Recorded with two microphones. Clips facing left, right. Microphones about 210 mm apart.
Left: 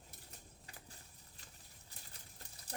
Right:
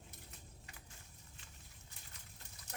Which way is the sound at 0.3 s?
35° left (ahead or behind).